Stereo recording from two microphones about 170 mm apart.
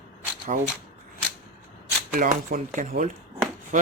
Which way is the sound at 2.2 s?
50° right (ahead or behind).